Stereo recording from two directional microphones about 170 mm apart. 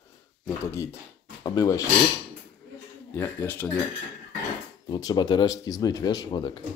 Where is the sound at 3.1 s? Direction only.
15° left (ahead or behind).